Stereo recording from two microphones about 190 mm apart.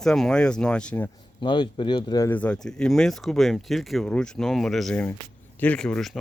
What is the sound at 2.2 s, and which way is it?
Speech, 5° left (ahead or behind).